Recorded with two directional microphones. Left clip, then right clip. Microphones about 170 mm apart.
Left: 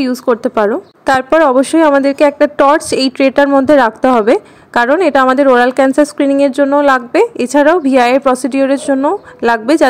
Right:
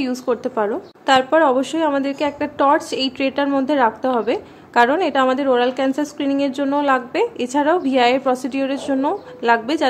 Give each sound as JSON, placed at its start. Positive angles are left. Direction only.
{"t": 0.0, "sound": "a woman's voice", "side_deg": 35}